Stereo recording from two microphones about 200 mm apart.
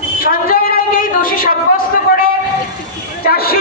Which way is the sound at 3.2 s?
50° left (ahead or behind).